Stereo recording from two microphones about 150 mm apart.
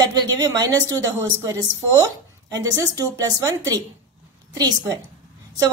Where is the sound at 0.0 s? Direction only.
25° right (ahead or behind).